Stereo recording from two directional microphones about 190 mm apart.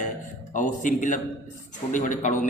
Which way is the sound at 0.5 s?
40° left (ahead or behind).